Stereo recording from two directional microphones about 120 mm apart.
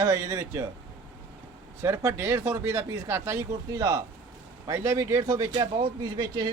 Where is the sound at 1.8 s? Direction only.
20° right (ahead or behind).